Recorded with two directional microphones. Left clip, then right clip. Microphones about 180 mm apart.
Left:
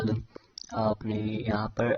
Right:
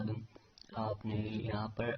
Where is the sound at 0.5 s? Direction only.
40° left (ahead or behind).